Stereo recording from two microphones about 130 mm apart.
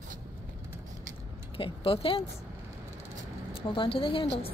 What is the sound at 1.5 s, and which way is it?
Speech, 45° left (ahead or behind).